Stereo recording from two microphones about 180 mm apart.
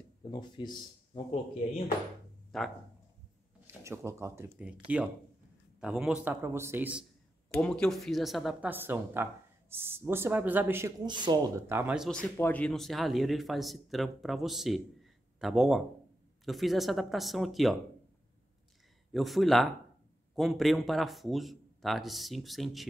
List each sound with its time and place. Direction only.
0.2 s speech: 25° left (ahead or behind)
2.5 s speech: centre (ahead or behind)
3.6 s speech: 15° right (ahead or behind)
7.5 s speech: 5° left (ahead or behind)
11.1 s speech: 25° right (ahead or behind); by 17.7 s centre (ahead or behind)
19.1 s speech: centre (ahead or behind)